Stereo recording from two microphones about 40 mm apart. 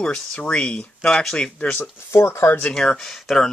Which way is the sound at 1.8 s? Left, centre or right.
Left.